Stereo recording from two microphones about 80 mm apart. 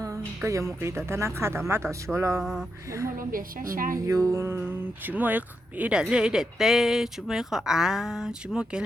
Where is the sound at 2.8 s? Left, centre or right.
Right.